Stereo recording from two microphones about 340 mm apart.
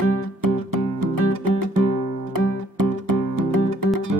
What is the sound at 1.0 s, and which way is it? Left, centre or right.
Music, right.